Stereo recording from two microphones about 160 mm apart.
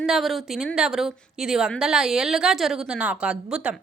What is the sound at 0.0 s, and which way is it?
A woman's voice, centre (ahead or behind).